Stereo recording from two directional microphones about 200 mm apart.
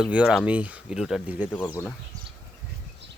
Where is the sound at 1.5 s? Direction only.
10° left (ahead or behind).